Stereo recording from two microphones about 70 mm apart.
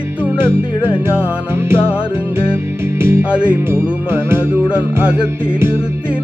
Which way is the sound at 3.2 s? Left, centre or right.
Centre.